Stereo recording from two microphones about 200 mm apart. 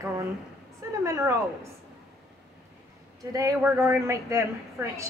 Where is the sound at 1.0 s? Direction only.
15° right (ahead or behind).